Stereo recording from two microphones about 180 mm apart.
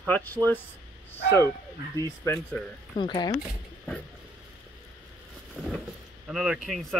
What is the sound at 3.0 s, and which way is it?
Speech, 25° left (ahead or behind).